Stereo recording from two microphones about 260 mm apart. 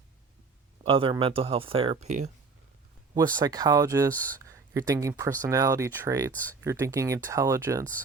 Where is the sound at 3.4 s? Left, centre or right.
Centre.